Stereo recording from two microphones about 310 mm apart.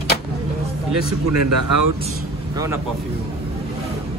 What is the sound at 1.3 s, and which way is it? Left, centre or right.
Speech, right.